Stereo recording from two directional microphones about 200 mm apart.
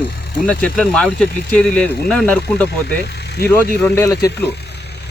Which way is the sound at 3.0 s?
55° left (ahead or behind).